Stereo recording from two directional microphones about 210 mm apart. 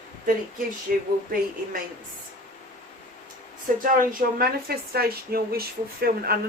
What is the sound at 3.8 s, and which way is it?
Speech, 45° right (ahead or behind).